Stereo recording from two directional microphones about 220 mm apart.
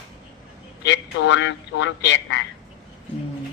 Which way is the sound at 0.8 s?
55° left (ahead or behind).